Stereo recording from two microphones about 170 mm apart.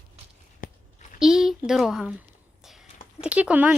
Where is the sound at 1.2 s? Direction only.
Centre (ahead or behind).